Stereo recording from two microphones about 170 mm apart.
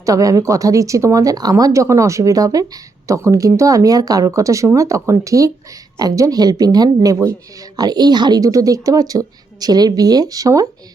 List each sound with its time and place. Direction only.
0.0 s speech: 20° right (ahead or behind)